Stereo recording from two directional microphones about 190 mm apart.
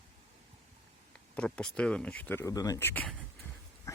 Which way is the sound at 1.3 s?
5° left (ahead or behind).